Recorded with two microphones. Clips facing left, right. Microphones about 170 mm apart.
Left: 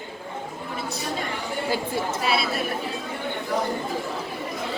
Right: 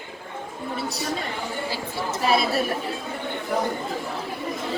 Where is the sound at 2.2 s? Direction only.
40° right (ahead or behind).